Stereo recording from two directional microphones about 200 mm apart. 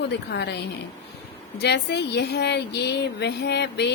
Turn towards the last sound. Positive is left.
turn(degrees=55)  # may be behind; listen again after turning